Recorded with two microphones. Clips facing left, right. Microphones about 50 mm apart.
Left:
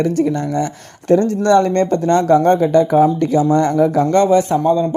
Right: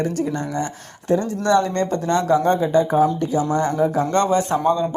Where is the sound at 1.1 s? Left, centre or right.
Left.